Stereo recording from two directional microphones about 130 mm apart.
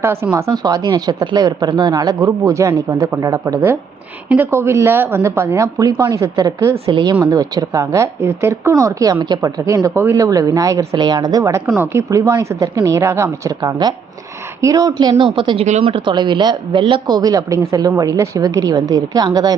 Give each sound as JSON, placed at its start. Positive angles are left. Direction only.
{"t": 0.0, "sound": "speech", "side_deg": -20}
{"t": 6.8, "sound": "speech", "side_deg": -35}
{"t": 15.2, "sound": "speech", "side_deg": -40}